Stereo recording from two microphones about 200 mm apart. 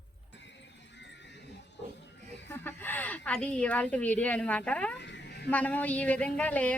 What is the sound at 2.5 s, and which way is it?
Speech, 10° left (ahead or behind).